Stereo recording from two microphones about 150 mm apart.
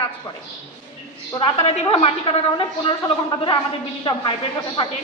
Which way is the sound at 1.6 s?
40° left (ahead or behind).